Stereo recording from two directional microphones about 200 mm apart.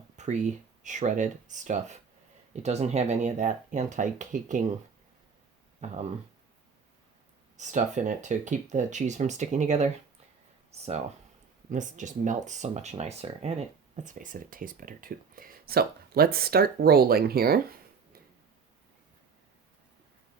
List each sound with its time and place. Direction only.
0.2 s a sound: 35° right (ahead or behind)
0.8 s speech: 40° right (ahead or behind)
5.8 s speech: 35° right (ahead or behind)
7.5 s speech: 35° right (ahead or behind)